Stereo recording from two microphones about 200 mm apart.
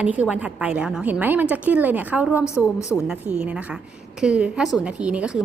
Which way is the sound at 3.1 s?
5° right (ahead or behind).